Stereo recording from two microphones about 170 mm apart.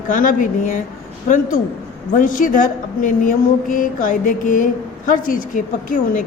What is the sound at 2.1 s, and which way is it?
A man's voice, 50° left (ahead or behind).